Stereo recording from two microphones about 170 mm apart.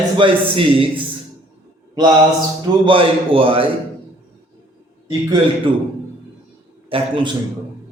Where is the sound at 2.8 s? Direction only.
30° right (ahead or behind).